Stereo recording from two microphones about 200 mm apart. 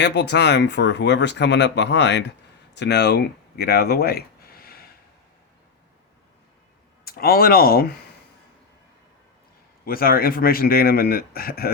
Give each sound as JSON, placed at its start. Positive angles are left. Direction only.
{"t": 0.0, "sound": "speech", "side_deg": 60}
{"t": 7.0, "sound": "speech", "side_deg": 50}
{"t": 9.8, "sound": "speech", "side_deg": 45}